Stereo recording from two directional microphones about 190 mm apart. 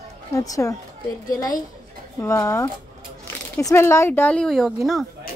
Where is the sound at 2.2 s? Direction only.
15° left (ahead or behind).